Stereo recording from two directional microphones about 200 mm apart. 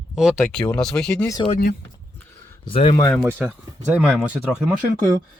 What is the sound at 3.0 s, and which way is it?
Speech, 10° left (ahead or behind).